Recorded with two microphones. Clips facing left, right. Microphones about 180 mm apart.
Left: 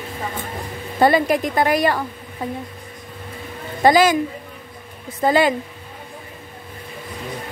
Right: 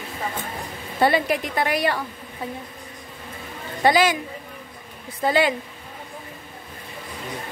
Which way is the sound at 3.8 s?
45° left (ahead or behind).